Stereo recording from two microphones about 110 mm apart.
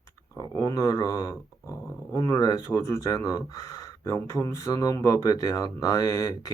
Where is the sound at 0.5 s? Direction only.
35° left (ahead or behind).